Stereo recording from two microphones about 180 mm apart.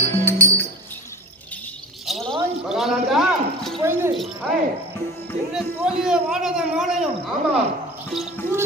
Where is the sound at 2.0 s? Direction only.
Centre (ahead or behind).